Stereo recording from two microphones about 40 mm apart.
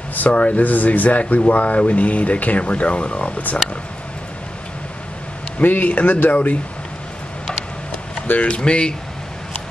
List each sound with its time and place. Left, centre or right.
0.3 s speech: left
0.7 s speech: left
5.6 s speech: left
7.9 s a sound: left
8.5 s speech: left